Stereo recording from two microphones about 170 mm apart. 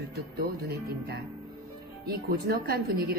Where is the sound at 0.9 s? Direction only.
70° right (ahead or behind).